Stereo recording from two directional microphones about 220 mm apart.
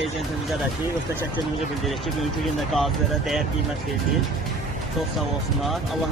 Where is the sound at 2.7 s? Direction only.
Centre (ahead or behind).